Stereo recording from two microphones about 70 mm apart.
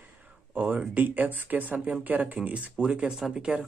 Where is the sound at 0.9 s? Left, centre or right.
Right.